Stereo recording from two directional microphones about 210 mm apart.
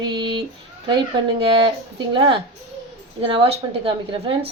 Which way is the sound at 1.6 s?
25° right (ahead or behind).